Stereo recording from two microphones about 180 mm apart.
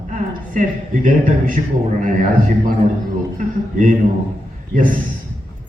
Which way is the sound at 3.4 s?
45° right (ahead or behind).